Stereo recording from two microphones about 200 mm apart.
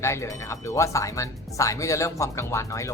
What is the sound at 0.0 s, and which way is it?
Speech, 15° left (ahead or behind).